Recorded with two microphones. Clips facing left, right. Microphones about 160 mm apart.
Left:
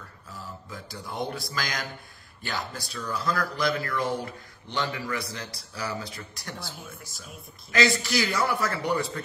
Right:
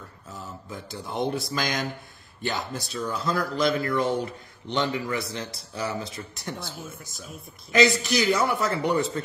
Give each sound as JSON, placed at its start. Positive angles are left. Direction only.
{"t": 0.7, "sound": "speech", "side_deg": -25}